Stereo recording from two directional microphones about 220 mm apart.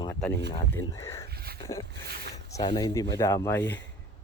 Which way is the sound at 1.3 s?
45° right (ahead or behind).